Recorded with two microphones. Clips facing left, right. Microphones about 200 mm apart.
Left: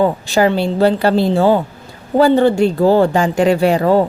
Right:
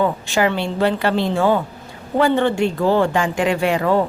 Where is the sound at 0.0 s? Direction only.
35° left (ahead or behind).